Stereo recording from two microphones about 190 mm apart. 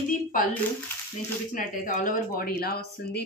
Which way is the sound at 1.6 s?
45° left (ahead or behind).